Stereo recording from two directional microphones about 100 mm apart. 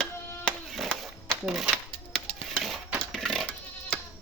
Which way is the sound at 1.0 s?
Centre (ahead or behind).